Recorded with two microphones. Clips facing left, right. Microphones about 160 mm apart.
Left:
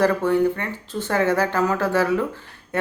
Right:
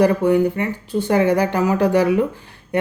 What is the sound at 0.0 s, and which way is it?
Speech, 15° right (ahead or behind).